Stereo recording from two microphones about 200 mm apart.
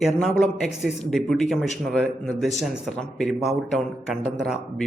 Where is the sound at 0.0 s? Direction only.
Centre (ahead or behind).